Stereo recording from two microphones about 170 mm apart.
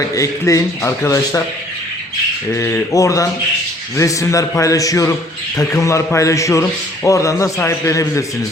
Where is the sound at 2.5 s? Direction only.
15° left (ahead or behind).